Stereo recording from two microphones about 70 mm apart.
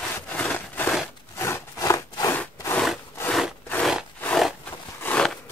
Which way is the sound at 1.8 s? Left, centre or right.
Left.